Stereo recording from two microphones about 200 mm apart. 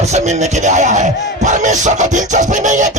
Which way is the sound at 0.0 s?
35° right (ahead or behind).